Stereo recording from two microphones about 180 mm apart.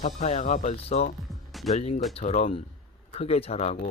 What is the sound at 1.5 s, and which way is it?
Music, centre (ahead or behind).